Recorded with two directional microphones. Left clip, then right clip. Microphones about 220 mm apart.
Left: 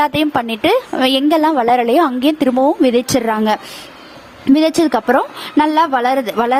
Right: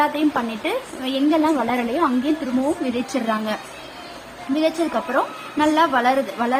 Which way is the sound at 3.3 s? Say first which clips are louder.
Left 8 dB; 50° left (ahead or behind).